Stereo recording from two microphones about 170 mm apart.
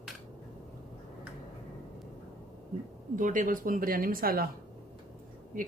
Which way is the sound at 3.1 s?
50° right (ahead or behind).